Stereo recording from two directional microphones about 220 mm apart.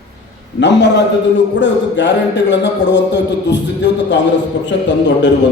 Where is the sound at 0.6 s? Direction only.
50° left (ahead or behind).